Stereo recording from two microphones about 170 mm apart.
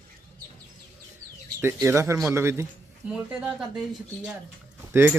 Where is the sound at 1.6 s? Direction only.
15° right (ahead or behind).